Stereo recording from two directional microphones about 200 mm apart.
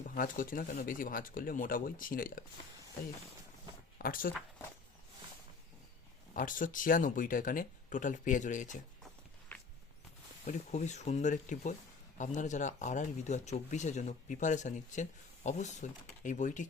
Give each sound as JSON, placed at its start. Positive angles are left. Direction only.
{"t": 0.0, "sound": "speech", "side_deg": 40}
{"t": 3.9, "sound": "speech", "side_deg": 45}
{"t": 6.3, "sound": "speech", "side_deg": 40}
{"t": 9.5, "sound": "walk", "side_deg": 10}
{"t": 10.4, "sound": "speech", "side_deg": 35}